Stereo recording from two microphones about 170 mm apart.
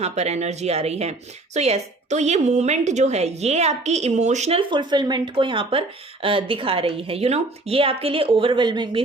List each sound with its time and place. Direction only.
0.0 s a woman's voice: 40° right (ahead or behind)